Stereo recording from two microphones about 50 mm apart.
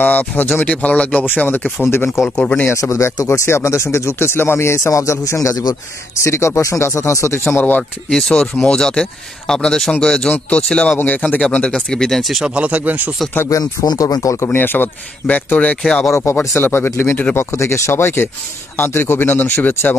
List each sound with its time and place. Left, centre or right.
0.0 s speech: left
2.7 s speech: left
6.1 s speech: left
8.1 s speech: centre
11.0 s speech: left
11.9 s speech: centre
12.4 s speech: right
13.4 s speech: left
14.5 s speech: left
15.2 s speech: left
15.8 s speech: centre
16.5 s speech: left
17.4 s speech: left
19.2 s speech: left